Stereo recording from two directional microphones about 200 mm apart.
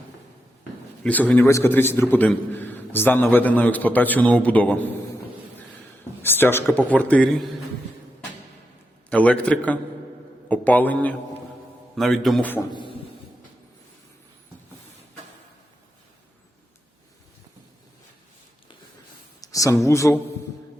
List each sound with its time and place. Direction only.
1.0 s a man's voice: 10° left (ahead or behind)
6.2 s a man's voice: 10° left (ahead or behind)
9.0 s a man's voice: 5° left (ahead or behind)
12.7 s a sound: 25° left (ahead or behind)
19.4 s speech: 15° left (ahead or behind)